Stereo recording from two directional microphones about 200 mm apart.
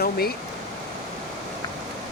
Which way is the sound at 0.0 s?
50° left (ahead or behind).